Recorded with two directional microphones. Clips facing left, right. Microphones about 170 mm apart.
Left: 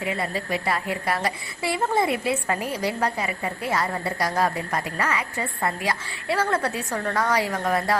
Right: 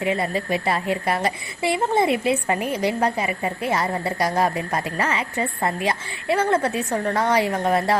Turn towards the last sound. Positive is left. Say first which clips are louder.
# right 3 dB
turn(degrees=-25)  # may be behind; listen again after turning